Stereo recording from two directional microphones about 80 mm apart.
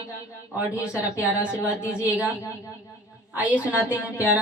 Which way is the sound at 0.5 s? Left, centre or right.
Centre.